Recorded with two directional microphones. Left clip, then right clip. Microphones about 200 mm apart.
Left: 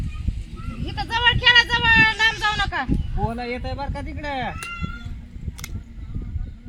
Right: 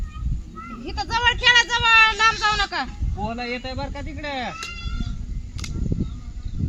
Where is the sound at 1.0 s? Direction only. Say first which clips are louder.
Left 1 dB; 50° left (ahead or behind).